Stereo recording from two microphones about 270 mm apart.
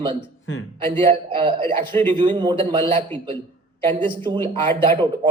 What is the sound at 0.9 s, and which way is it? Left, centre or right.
A man's voice, centre.